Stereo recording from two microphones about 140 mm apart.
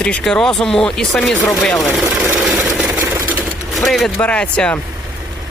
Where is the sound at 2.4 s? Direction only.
Centre (ahead or behind).